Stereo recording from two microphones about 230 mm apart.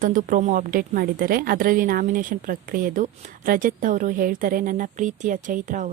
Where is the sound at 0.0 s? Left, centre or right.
Right.